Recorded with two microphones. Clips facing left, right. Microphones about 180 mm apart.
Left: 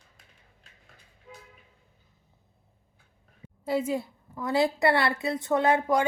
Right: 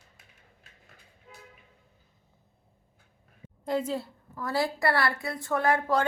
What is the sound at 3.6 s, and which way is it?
A woman's voice, 10° left (ahead or behind).